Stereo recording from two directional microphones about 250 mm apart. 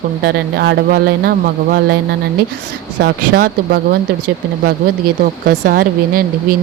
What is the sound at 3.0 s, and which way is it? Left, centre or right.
Speech, right.